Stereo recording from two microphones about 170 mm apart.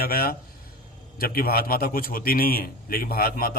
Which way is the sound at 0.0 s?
65° left (ahead or behind).